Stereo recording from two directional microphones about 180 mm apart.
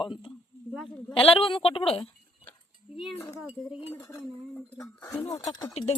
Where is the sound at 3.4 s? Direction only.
5° right (ahead or behind).